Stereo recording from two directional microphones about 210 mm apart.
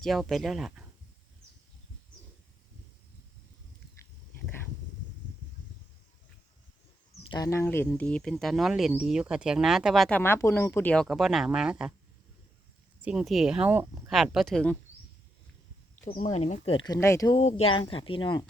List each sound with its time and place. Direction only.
0.0 s speech: centre (ahead or behind)
7.3 s speech: 15° left (ahead or behind); by 11.9 s 5° right (ahead or behind)
13.0 s speech: 5° right (ahead or behind)
14.1 s speech: centre (ahead or behind)
16.1 s speech: 35° left (ahead or behind); by 17.3 s 15° left (ahead or behind)
17.3 s speech: 30° left (ahead or behind)